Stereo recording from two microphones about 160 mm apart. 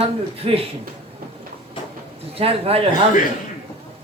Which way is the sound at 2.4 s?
35° right (ahead or behind).